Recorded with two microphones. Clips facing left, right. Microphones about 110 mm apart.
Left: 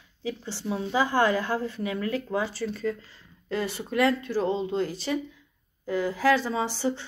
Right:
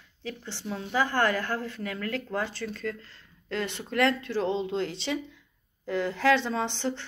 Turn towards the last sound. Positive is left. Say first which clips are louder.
# left 2 dB
turn(degrees=10)  # may be behind; listen again after turning